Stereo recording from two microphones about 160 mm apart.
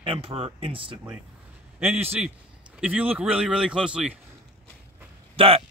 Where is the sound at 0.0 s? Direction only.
35° right (ahead or behind).